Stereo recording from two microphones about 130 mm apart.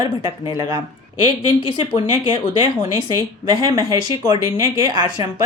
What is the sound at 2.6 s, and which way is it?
Speech, 30° right (ahead or behind).